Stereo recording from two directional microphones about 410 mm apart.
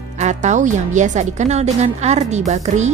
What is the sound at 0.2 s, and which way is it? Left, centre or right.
Speech, centre.